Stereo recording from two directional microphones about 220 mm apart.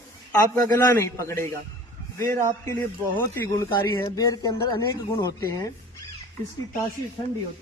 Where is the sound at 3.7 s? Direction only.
20° left (ahead or behind).